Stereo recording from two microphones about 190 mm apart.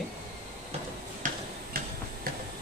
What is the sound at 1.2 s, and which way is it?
Tick-tock, 45° right (ahead or behind).